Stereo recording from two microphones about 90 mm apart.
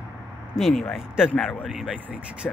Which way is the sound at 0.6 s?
Centre (ahead or behind).